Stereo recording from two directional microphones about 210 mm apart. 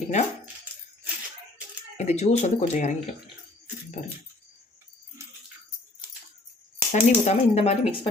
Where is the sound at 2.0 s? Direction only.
35° left (ahead or behind).